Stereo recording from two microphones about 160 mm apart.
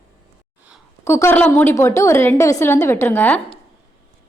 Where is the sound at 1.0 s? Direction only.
15° left (ahead or behind).